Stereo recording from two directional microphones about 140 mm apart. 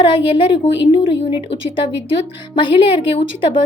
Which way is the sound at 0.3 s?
35° left (ahead or behind).